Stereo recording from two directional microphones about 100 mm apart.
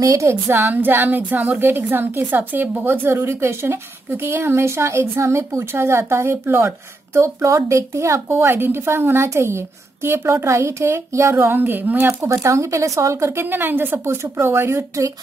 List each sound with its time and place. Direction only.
0.0 s a woman's voice: 30° right (ahead or behind)
12.2 s a woman's voice: 30° right (ahead or behind)